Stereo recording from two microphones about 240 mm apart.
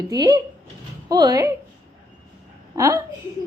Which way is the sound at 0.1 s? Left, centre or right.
Centre.